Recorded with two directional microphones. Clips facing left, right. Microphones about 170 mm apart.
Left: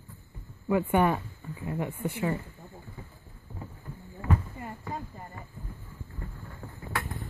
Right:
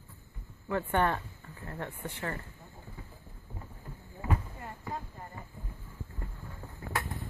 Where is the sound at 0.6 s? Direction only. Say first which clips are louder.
Left 5 dB; 10° left (ahead or behind).